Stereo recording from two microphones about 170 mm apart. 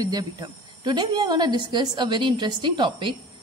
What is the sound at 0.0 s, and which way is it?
Speech, 25° right (ahead or behind).